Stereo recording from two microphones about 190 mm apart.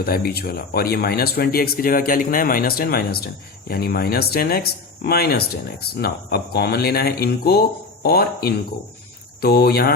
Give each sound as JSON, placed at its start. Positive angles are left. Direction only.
{"t": 0.0, "sound": "speech", "side_deg": 55}